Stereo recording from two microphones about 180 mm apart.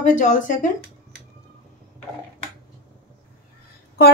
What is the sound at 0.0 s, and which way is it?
Speech, 45° left (ahead or behind).